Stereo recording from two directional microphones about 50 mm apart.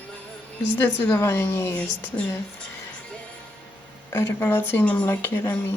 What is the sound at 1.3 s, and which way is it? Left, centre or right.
Speech, left.